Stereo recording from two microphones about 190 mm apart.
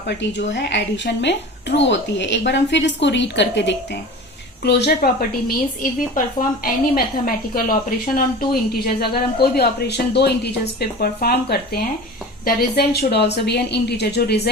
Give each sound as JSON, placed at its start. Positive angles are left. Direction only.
{"t": 0.2, "sound": "speech", "side_deg": 70}
{"t": 5.5, "sound": "a woman's voice", "side_deg": 45}